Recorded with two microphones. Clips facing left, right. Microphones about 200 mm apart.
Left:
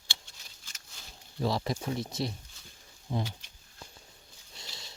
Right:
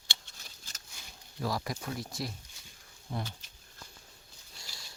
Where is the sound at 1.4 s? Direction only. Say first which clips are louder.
Left 4 dB; 25° left (ahead or behind).